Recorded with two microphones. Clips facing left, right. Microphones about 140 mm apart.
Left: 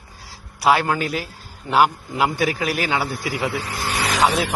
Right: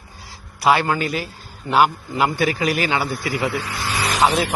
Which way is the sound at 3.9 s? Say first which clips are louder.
Left 1 dB; 60° left (ahead or behind).